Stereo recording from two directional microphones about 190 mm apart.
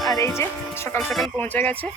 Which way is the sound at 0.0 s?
20° left (ahead or behind).